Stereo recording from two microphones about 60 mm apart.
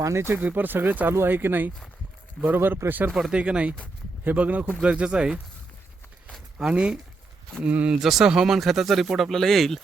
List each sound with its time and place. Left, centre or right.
0.0 s speech: right
0.4 s speech: right
3.1 s speech: centre
3.3 s speech: centre
6.6 s speech: centre
7.9 s speech: centre